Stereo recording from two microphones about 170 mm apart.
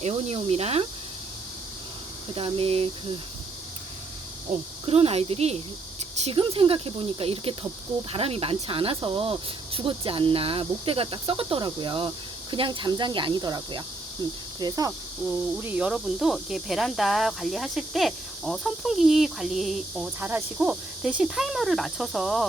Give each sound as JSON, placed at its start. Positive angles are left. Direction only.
{"t": 0.0, "sound": "speech", "side_deg": -35}
{"t": 2.3, "sound": "speech", "side_deg": -35}
{"t": 4.5, "sound": "speech", "side_deg": -45}